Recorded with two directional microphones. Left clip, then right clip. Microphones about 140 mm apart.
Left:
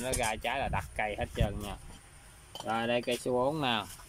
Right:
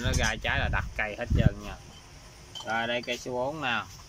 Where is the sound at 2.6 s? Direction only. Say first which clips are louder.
Right 1 dB; 30° left (ahead or behind).